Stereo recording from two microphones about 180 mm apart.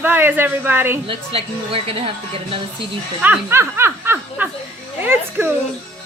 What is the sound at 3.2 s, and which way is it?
A woman's voice, 10° right (ahead or behind).